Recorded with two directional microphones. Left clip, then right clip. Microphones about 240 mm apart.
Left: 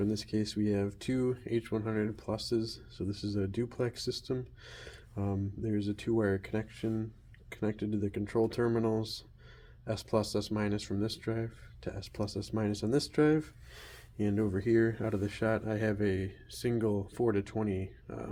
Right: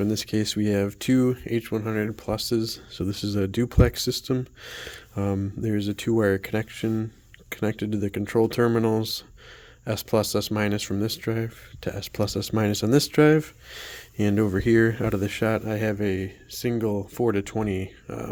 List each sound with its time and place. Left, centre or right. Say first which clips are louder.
0.0 s speech: right 8 dB; right